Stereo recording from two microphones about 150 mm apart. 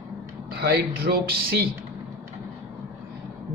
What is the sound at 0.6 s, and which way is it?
Speech, 90° right.